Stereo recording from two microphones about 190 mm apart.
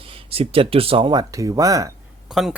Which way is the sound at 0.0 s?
30° right (ahead or behind).